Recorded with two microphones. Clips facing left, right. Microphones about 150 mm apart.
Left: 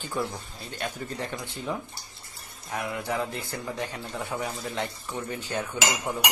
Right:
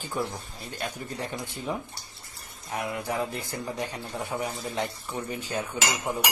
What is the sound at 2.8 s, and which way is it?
A man's voice, 25° right (ahead or behind).